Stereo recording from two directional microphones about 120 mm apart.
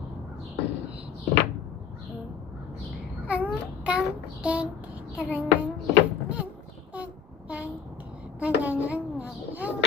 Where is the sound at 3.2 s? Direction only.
10° right (ahead or behind).